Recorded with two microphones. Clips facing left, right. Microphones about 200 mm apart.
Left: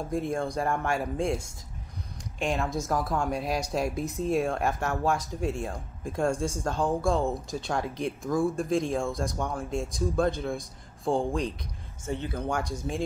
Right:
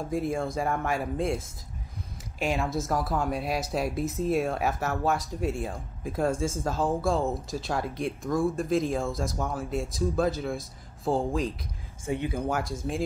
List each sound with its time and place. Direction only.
0.0 s speech: centre (ahead or behind)
12.1 s speech: 10° right (ahead or behind)